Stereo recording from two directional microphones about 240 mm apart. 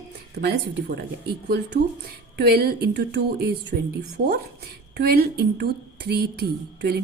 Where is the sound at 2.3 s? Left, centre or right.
Right.